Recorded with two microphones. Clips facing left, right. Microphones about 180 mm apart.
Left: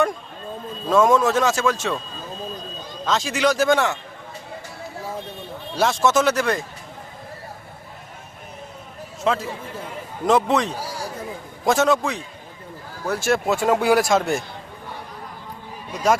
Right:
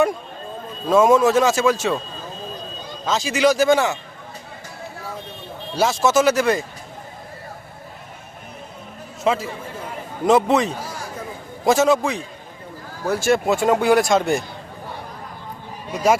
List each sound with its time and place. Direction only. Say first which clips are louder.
0.9 s a man's voice: right 2 dB; 5° right (ahead or behind)
3.1 s speech: right 3 dB; centre (ahead or behind)
5.7 s speech: right 1 dB; centre (ahead or behind)
9.2 s speech: right 2 dB; 5° right (ahead or behind)